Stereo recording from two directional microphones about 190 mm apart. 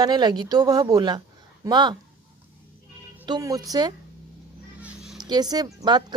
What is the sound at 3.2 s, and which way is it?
Speech, 20° right (ahead or behind).